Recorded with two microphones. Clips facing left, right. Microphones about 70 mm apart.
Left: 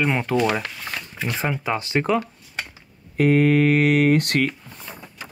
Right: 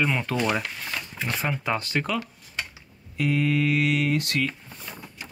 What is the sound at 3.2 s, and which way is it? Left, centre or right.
Speech, left.